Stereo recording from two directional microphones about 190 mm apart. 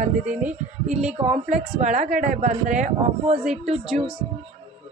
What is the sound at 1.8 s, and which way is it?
Speech, 40° right (ahead or behind).